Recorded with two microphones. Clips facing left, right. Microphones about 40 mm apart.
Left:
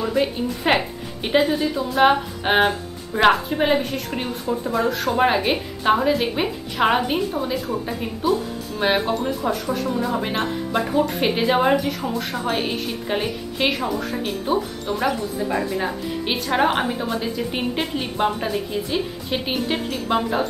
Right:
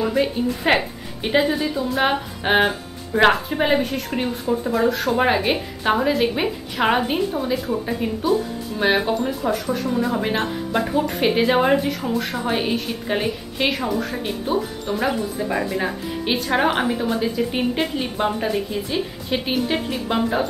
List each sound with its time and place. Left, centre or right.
0.2 s speech: centre